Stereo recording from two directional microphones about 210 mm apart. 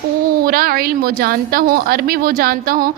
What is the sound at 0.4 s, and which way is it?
A woman's voice, 45° right (ahead or behind).